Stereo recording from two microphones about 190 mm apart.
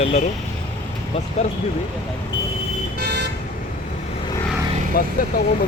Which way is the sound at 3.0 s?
60° right (ahead or behind).